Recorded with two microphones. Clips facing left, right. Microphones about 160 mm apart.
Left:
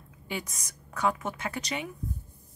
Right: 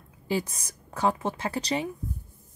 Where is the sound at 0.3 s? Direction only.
30° right (ahead or behind).